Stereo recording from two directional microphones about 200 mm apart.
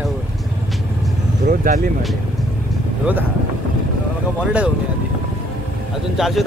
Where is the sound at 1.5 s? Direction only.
45° right (ahead or behind).